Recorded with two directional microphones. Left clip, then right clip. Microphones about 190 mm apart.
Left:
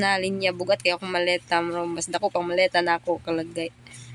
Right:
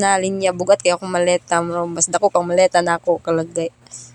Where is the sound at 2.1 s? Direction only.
20° right (ahead or behind).